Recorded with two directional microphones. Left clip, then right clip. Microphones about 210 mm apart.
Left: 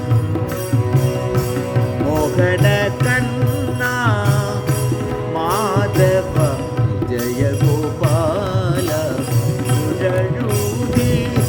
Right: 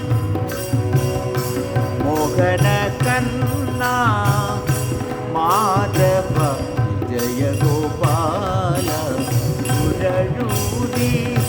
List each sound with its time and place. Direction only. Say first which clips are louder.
2.4 s music: left 2 dB; centre (ahead or behind)
3.8 s jingle bell: right 2 dB; centre (ahead or behind)
5.4 s jingle bell: right 2 dB; centre (ahead or behind)